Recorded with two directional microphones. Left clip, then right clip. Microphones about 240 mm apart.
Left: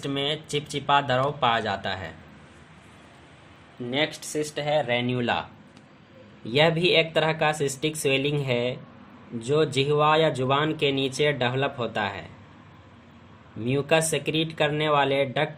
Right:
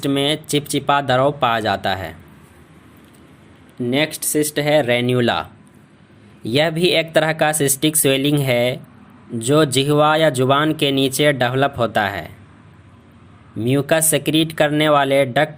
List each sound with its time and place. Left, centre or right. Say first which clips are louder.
0.0 s speech: right 9 dB; right
3.8 s speech: right 7 dB; right
13.7 s speech: right 6 dB; right